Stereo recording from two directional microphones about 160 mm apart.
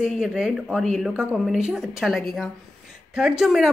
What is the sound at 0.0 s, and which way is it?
A woman's voice, 5° right (ahead or behind).